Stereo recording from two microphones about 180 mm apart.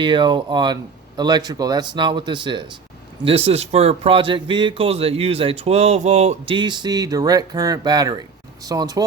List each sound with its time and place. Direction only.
0.0 s speech: 25° right (ahead or behind)